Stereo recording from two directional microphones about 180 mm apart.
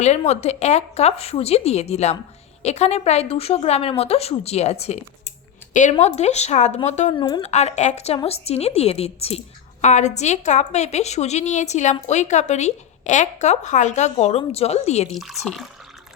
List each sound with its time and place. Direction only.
0.0 s a woman's voice: 40° left (ahead or behind)
7.1 s speech: 25° left (ahead or behind)
7.4 s a woman's voice: 40° left (ahead or behind)
15.1 s speech: centre (ahead or behind)